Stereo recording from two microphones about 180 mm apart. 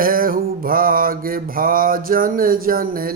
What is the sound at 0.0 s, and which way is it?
Mantra, 50° right (ahead or behind).